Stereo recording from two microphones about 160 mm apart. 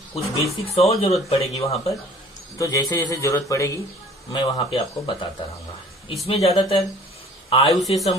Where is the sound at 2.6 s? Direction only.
20° left (ahead or behind).